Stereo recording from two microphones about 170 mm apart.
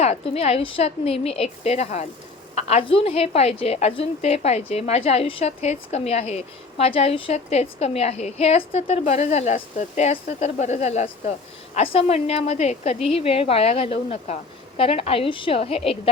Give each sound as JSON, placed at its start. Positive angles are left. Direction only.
{"t": 0.0, "sound": "a woman's voice", "side_deg": 40}